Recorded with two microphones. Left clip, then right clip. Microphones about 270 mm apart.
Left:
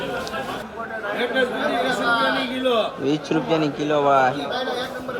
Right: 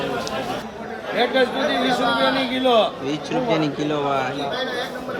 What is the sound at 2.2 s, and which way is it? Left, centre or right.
Speech, right.